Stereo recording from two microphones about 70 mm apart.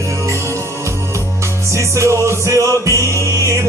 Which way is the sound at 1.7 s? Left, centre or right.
Right.